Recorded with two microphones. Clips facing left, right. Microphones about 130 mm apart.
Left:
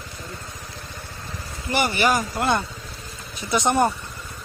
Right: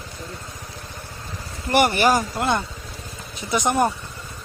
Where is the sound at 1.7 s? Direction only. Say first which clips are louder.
Right 4 dB; 50° right (ahead or behind).